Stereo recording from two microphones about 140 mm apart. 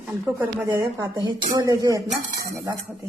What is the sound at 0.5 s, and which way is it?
Speech, 20° right (ahead or behind).